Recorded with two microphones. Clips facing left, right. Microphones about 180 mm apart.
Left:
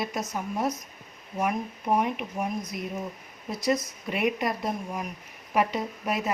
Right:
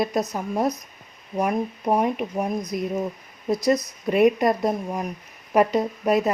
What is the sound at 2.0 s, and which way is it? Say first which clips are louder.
Speech: right 5 dB; 40° right (ahead or behind).